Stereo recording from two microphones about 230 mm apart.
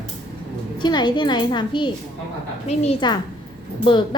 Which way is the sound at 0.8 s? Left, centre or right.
Centre.